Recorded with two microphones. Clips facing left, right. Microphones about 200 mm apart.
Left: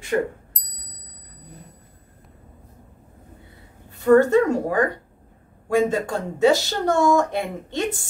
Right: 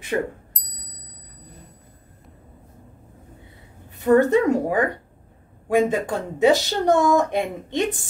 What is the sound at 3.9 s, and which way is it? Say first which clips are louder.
A woman's voice: left 1 dB; 15° right (ahead or behind).